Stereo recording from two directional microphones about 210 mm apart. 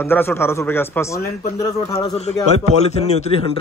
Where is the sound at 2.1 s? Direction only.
30° left (ahead or behind).